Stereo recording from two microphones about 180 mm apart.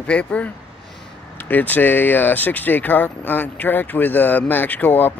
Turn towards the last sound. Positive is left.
turn(degrees=10)  # may be behind; listen again after turning